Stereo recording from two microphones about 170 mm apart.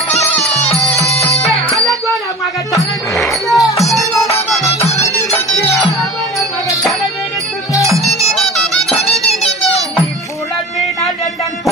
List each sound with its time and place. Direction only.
2.8 s music: centre (ahead or behind)
4.6 s music: 20° left (ahead or behind)
4.8 s music: 40° left (ahead or behind)
8.2 s music: centre (ahead or behind)
9.3 s children playing: 40° left (ahead or behind)